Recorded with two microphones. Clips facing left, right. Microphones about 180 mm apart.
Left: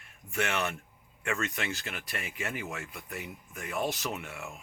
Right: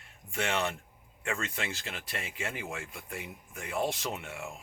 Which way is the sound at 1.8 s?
25° right (ahead or behind).